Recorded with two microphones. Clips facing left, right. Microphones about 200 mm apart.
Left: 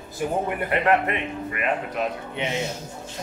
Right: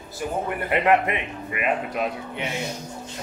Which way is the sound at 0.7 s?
15° right (ahead or behind).